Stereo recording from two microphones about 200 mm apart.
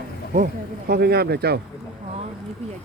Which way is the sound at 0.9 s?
50° right (ahead or behind).